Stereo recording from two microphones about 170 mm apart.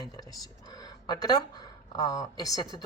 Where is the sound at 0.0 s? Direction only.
20° left (ahead or behind).